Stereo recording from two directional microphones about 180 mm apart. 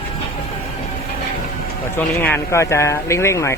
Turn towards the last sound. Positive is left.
turn(degrees=15)  # may be behind; listen again after turning